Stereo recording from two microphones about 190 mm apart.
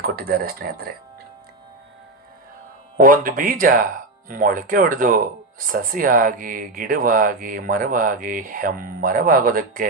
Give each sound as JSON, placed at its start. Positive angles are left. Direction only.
{"t": 0.0, "sound": "speech", "side_deg": -50}
{"t": 3.0, "sound": "speech", "side_deg": -45}